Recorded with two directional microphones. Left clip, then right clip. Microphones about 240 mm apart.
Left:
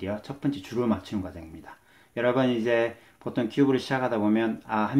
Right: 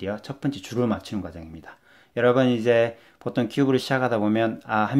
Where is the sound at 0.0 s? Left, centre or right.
Right.